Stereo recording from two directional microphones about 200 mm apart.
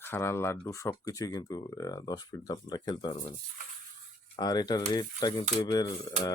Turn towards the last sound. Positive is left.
turn(degrees=20)  # may be behind; listen again after turning